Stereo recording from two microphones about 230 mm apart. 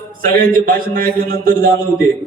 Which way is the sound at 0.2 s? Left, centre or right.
Right.